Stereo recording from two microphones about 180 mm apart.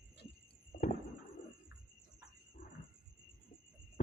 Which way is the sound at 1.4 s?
45° left (ahead or behind).